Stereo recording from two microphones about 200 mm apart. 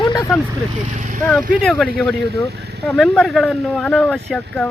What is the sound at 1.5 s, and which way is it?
Speech, 5° left (ahead or behind).